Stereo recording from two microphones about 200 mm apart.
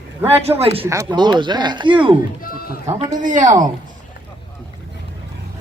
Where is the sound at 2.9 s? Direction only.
40° right (ahead or behind).